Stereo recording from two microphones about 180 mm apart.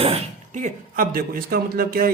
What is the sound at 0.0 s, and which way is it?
Speech, 35° right (ahead or behind).